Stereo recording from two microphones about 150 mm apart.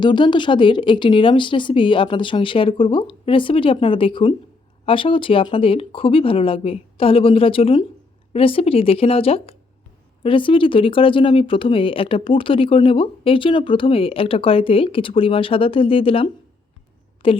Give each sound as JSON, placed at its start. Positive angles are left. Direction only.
{"t": 0.0, "sound": "speech", "side_deg": 30}